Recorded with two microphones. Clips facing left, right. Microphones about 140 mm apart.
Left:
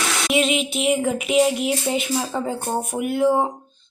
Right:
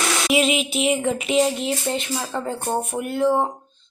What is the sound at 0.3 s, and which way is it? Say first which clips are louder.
Speech: even; centre (ahead or behind).